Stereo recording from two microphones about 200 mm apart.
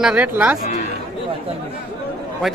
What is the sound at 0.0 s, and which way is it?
Speech, 10° right (ahead or behind).